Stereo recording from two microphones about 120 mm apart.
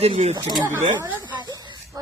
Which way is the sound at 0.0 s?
60° right (ahead or behind).